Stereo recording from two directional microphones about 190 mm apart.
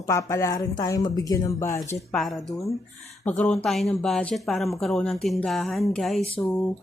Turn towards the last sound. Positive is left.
turn(degrees=0)  # may be behind; listen again after turning